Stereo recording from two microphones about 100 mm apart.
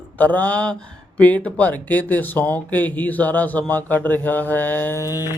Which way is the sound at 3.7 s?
15° left (ahead or behind).